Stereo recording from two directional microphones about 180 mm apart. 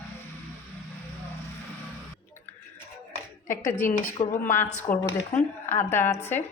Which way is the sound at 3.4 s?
45° left (ahead or behind).